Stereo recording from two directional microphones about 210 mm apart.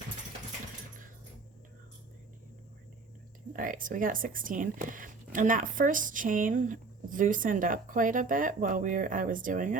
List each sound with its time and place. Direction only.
3.5 s speech: 40° right (ahead or behind)